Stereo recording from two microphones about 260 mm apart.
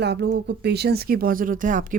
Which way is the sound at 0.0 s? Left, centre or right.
Right.